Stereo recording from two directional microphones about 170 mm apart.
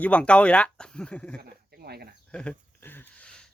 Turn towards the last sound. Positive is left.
turn(degrees=5)  # may be behind; listen again after turning